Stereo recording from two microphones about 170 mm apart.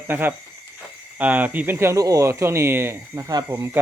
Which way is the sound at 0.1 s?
10° right (ahead or behind).